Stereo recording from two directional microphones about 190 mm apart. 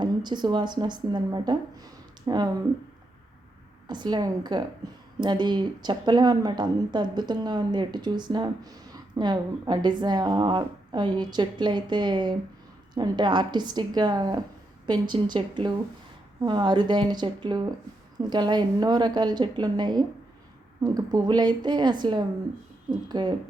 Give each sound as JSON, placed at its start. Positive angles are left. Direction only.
{"t": 0.0, "sound": "speech", "side_deg": -25}
{"t": 3.8, "sound": "speech", "side_deg": -20}